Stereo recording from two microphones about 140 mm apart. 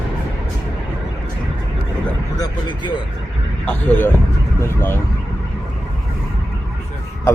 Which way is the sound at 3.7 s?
10° left (ahead or behind).